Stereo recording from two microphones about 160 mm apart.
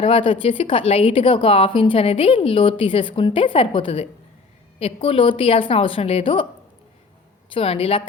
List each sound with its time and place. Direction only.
0.0 s a woman's voice: 35° left (ahead or behind)
7.5 s a woman's voice: 35° left (ahead or behind)